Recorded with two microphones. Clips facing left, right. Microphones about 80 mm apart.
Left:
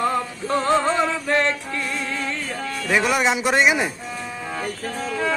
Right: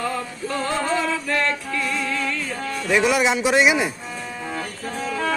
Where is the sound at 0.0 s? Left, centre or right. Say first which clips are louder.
Left 4 dB; left.